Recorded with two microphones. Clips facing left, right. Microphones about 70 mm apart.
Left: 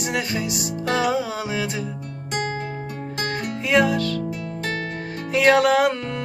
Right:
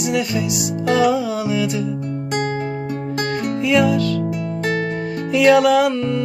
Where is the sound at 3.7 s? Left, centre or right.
Left.